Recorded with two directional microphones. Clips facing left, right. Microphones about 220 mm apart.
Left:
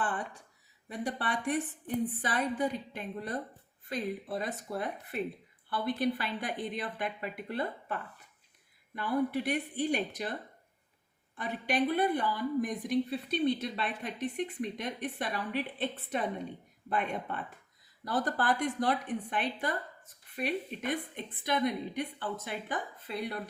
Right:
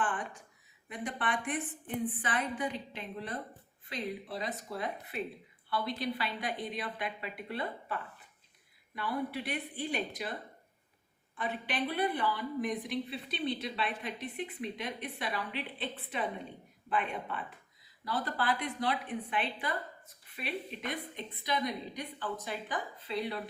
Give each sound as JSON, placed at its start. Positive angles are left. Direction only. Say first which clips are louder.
{"t": 0.9, "sound": "a woman's voice", "louder": "left 1 dB", "side_deg": 40}
{"t": 9.0, "sound": "a woman's voice", "louder": "left 5 dB", "side_deg": 45}
{"t": 11.3, "sound": "a woman's voice", "louder": "left 4 dB", "side_deg": 45}